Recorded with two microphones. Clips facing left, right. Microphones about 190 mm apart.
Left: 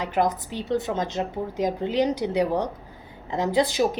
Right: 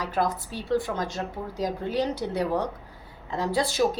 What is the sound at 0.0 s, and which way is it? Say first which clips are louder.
A woman's voice: left 3 dB; 20° left (ahead or behind).